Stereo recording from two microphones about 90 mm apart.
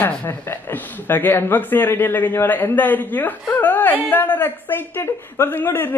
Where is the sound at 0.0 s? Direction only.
20° left (ahead or behind).